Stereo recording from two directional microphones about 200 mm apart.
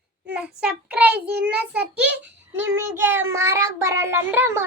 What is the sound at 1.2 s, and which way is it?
Speech, 55° right (ahead or behind).